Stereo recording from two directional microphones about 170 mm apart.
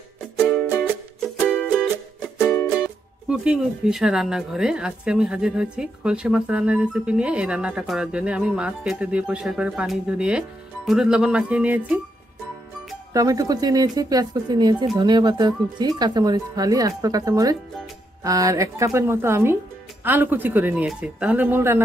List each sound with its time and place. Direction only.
0.4 s music: 5° left (ahead or behind)
2.7 s speech: 5° right (ahead or behind)
13.1 s speech: 20° right (ahead or behind)